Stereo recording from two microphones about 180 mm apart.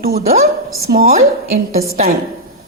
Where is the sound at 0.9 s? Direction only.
70° right (ahead or behind).